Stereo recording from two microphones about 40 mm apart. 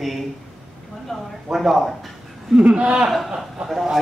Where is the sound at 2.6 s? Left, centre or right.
Right.